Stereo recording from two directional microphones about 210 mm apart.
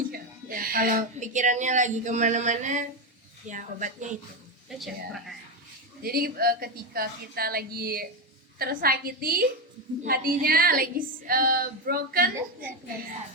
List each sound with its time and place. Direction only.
0.1 s speech: 45° right (ahead or behind)
4.7 s a woman's voice: centre (ahead or behind)
6.0 s speech: 45° right (ahead or behind)